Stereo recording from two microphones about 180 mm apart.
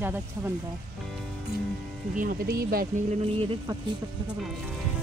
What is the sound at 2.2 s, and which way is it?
Speech, 55° right (ahead or behind).